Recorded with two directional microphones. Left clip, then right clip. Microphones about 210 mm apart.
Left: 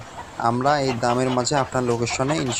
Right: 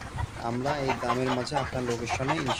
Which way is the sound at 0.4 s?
15° left (ahead or behind).